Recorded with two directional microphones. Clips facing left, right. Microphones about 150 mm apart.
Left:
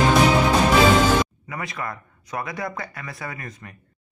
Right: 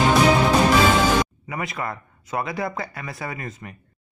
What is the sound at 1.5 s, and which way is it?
Speech, 20° right (ahead or behind).